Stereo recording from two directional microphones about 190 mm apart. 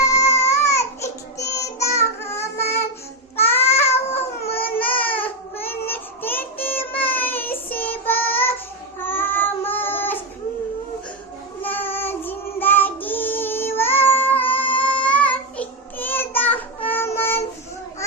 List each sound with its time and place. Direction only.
0.0 s music: 15° left (ahead or behind)
3.3 s child singing: 10° left (ahead or behind)
11.6 s child singing: 10° left (ahead or behind)